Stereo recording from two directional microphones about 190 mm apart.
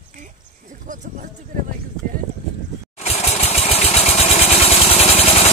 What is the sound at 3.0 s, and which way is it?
Vehicle, 35° left (ahead or behind).